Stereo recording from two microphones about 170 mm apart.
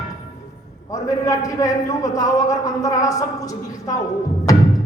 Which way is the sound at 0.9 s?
20° left (ahead or behind).